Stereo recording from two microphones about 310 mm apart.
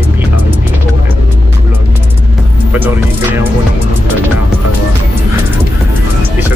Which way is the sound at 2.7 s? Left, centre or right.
Centre.